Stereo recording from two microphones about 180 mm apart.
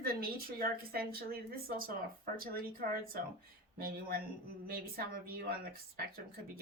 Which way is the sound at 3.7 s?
55° right (ahead or behind).